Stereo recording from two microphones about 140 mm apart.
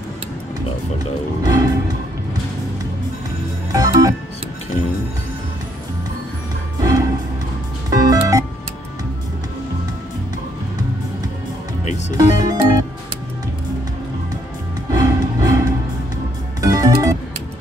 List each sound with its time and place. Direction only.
1.4 s music: 25° right (ahead or behind)
3.7 s music: 25° right (ahead or behind)
6.8 s music: 25° right (ahead or behind)
12.2 s music: 25° right (ahead or behind)
14.9 s music: 25° right (ahead or behind)